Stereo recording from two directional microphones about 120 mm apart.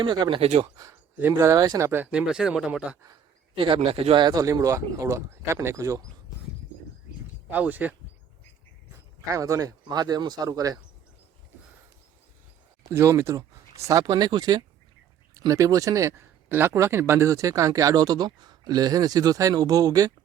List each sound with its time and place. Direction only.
0.0 s speech: 40° right (ahead or behind); by 0.6 s 55° right (ahead or behind)
1.4 s speech: 30° right (ahead or behind)
1.9 s speech: 15° right (ahead or behind)
3.5 s speech: 45° right (ahead or behind); by 6.1 s 25° right (ahead or behind)
7.5 s speech: 15° right (ahead or behind)
9.3 s speech: 25° right (ahead or behind)
12.9 s speech: 20° right (ahead or behind)